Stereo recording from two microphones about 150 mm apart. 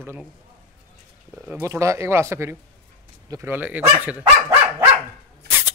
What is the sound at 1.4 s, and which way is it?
Speech, 15° right (ahead or behind).